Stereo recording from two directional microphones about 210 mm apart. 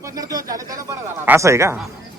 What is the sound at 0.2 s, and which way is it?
Speech, 15° right (ahead or behind).